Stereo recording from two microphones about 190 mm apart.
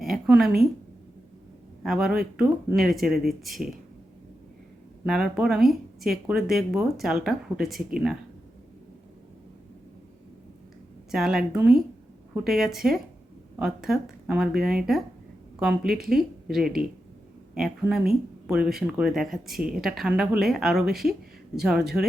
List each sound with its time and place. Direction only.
0.0 s speech: centre (ahead or behind)
1.8 s speech: centre (ahead or behind)
5.0 s speech: 5° right (ahead or behind)
11.1 s speech: centre (ahead or behind)
15.5 s speech: 5° right (ahead or behind)